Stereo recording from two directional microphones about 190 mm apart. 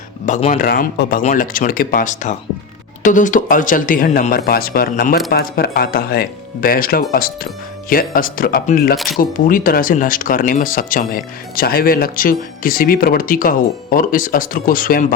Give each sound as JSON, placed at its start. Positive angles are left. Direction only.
{"t": 0.3, "sound": "speech", "side_deg": 35}
{"t": 0.6, "sound": "speech", "side_deg": 50}